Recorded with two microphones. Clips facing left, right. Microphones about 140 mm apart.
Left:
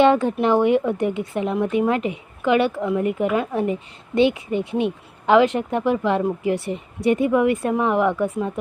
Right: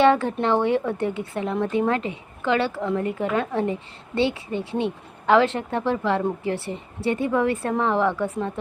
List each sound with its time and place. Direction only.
0.0 s a woman's voice: 15° left (ahead or behind)